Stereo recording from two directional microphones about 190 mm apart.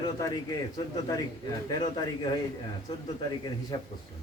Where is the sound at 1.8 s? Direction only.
20° left (ahead or behind).